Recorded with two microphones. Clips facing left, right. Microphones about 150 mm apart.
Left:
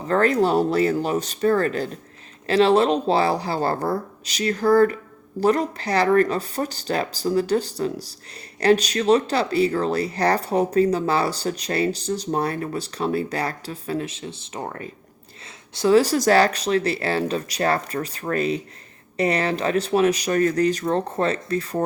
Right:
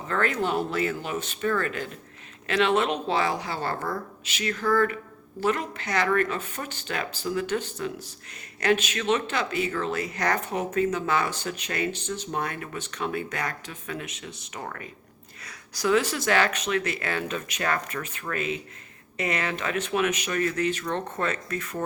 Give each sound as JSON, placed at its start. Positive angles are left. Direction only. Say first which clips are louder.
{"t": 0.1, "sound": "speech", "louder": "left 8 dB", "side_deg": 35}